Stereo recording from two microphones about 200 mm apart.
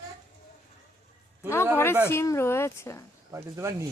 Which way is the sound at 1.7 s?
10° left (ahead or behind).